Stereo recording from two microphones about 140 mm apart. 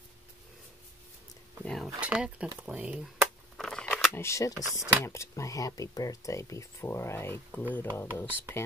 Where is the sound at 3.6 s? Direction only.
5° left (ahead or behind).